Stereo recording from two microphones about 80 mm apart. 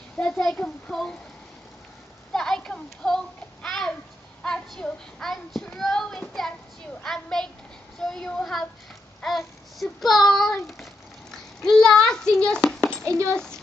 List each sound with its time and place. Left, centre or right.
0.2 s a child's voice: centre
2.3 s a sound: centre
4.4 s a child's voice: centre
13.0 s a child's voice: right
13.3 s a child's voice: centre